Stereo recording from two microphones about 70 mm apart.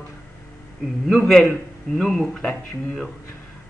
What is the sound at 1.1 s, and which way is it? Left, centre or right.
A man's voice, centre.